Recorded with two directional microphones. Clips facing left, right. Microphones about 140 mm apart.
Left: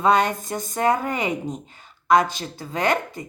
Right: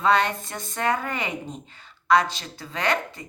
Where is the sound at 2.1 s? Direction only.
45° left (ahead or behind).